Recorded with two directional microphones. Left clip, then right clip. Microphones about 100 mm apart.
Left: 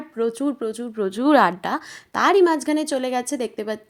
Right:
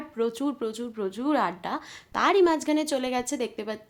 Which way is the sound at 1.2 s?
90° left.